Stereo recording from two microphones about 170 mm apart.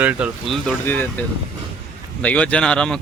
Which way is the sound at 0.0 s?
5° right (ahead or behind).